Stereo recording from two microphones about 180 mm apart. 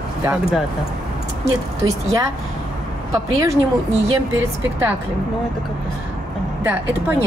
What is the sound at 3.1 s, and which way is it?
Speech, 15° right (ahead or behind).